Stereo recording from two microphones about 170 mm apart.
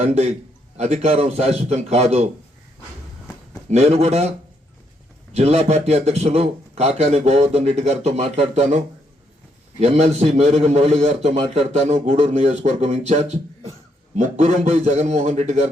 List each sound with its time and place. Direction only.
0.0 s a man's voice: 40° right (ahead or behind)
3.7 s a man's voice: 40° right (ahead or behind)
9.8 s a man's voice: 40° right (ahead or behind)